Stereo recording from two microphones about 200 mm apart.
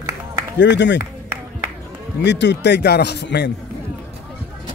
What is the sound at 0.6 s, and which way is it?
Speech, 65° left (ahead or behind).